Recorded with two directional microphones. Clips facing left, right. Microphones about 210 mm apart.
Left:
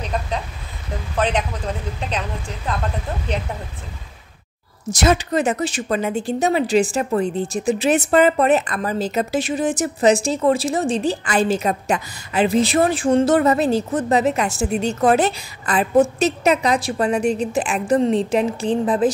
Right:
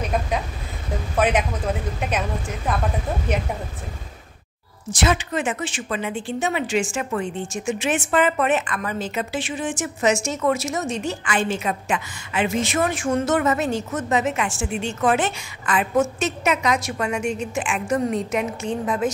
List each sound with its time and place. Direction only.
1.1 s a woman's voice: 10° right (ahead or behind)
4.8 s a woman's voice: 40° left (ahead or behind)